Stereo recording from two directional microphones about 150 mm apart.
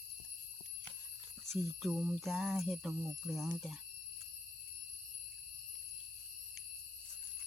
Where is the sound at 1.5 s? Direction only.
Centre (ahead or behind).